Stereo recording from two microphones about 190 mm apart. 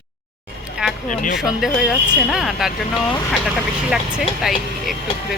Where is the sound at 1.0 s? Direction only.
45° left (ahead or behind).